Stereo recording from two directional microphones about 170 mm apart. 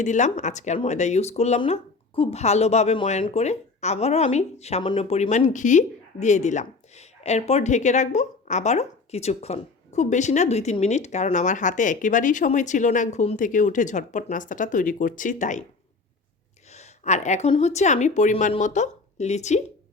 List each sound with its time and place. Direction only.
0.0 s speech: 45° left (ahead or behind)
16.7 s a sound: 40° left (ahead or behind)
17.6 s speech: 40° left (ahead or behind)